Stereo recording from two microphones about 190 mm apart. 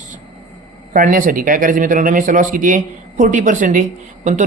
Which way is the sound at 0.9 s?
45° right (ahead or behind).